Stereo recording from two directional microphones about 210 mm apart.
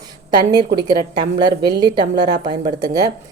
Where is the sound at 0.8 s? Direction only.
20° right (ahead or behind).